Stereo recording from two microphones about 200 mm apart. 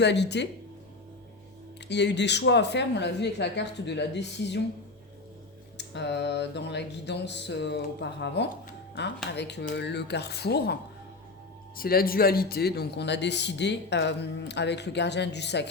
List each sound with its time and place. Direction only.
0.0 s a man's voice: 60° left (ahead or behind)
1.9 s a man's voice: 60° left (ahead or behind)
5.7 s a man's voice: 60° left (ahead or behind)
11.8 s a man's voice: 50° left (ahead or behind)